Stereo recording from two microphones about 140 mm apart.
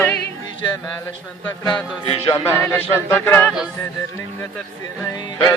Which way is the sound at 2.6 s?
15° left (ahead or behind).